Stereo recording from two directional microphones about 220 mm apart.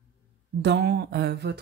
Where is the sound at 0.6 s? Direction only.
50° right (ahead or behind).